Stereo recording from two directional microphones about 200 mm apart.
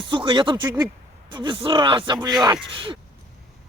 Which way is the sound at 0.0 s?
25° right (ahead or behind).